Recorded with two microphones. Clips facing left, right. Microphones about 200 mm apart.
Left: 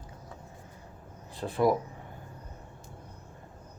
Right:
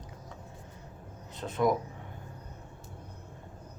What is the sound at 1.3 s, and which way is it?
Speech, 30° left (ahead or behind).